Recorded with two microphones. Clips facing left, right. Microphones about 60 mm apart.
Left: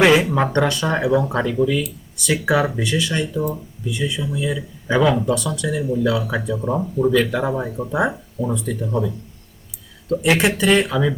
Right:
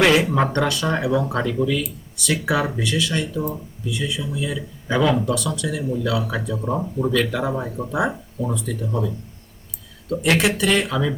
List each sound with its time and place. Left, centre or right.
0.0 s speech: centre
1.6 s speech: centre
2.2 s speech: centre
10.1 s speech: centre